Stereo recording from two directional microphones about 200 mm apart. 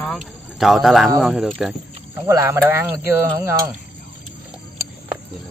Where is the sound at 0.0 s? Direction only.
Centre (ahead or behind).